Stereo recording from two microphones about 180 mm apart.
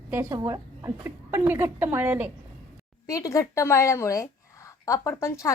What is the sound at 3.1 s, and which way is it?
A woman's voice, 20° left (ahead or behind).